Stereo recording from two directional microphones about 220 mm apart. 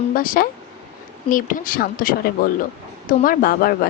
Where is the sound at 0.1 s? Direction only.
40° left (ahead or behind).